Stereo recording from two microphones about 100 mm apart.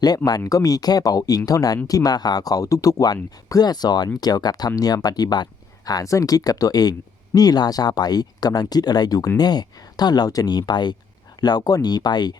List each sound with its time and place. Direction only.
0.3 s speech: 40° left (ahead or behind)